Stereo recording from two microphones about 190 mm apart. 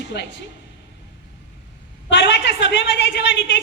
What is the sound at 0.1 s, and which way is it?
Speech, 65° left (ahead or behind).